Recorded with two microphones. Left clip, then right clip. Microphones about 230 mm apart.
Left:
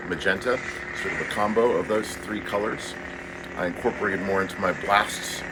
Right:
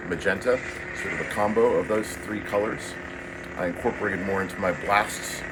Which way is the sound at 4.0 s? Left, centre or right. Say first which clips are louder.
Left 2 dB; centre.